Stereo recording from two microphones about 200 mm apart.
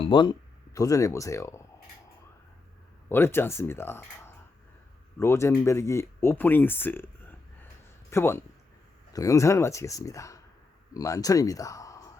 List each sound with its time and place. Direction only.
0.0 s speech: 25° left (ahead or behind)
3.1 s speech: 10° left (ahead or behind)